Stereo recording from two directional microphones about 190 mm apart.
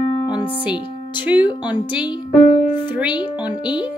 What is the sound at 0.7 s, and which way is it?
Speech, 25° left (ahead or behind).